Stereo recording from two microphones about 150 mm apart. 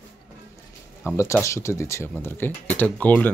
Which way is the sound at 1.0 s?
20° left (ahead or behind).